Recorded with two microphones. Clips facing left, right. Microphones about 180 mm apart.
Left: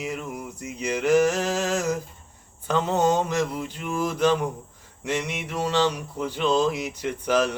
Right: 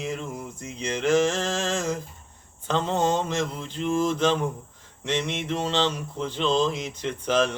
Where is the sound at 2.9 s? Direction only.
10° left (ahead or behind).